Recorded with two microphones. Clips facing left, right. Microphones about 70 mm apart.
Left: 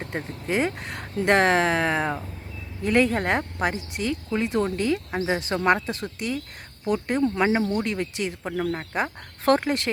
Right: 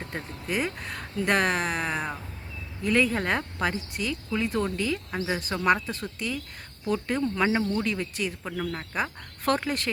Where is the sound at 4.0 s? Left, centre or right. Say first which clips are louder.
Left 4 dB; left.